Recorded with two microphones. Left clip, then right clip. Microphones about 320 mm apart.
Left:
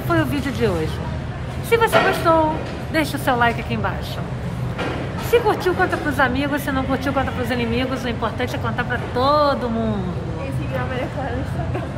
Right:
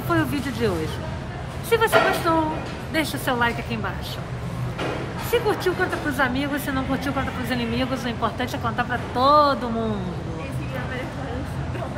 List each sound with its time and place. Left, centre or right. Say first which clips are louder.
0.1 s speech: left 3 dB; centre
5.3 s speech: left 5 dB; centre